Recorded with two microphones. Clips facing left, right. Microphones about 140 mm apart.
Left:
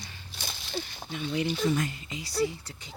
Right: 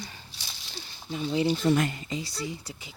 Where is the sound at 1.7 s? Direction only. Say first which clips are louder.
Right 5 dB; 65° right (ahead or behind).